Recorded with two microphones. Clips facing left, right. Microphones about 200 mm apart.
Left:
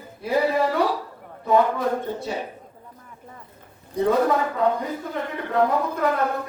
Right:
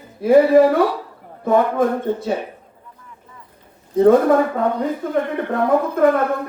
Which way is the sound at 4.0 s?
55° right (ahead or behind).